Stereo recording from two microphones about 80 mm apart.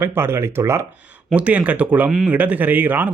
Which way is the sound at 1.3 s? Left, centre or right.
Centre.